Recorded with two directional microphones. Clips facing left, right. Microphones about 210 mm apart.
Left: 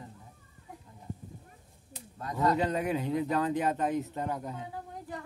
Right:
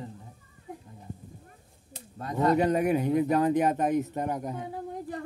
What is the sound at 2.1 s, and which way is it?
Speech, 25° right (ahead or behind).